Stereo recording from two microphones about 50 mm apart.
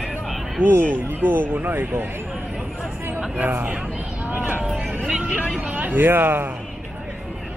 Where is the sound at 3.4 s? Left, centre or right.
Right.